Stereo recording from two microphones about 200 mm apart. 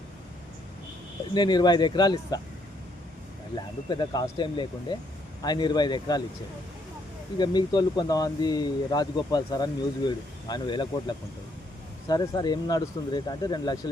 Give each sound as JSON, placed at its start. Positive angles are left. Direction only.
{"t": 1.3, "sound": "speech", "side_deg": 20}
{"t": 3.5, "sound": "speech", "side_deg": 20}
{"t": 7.3, "sound": "speech", "side_deg": 20}
{"t": 12.0, "sound": "speech", "side_deg": 20}